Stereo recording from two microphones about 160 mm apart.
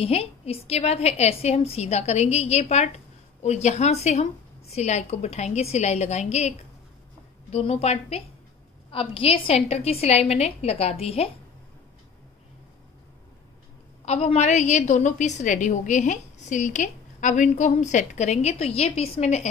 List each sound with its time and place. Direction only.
0.0 s a woman's voice: 40° left (ahead or behind)
7.5 s a woman's voice: 40° left (ahead or behind)
14.0 s a woman's voice: 45° left (ahead or behind)